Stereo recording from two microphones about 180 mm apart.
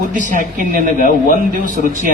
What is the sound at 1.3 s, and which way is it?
Speech, 50° right (ahead or behind).